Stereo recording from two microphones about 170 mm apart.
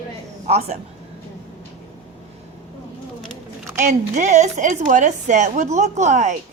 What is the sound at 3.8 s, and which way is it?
A woman's voice, 45° right (ahead or behind).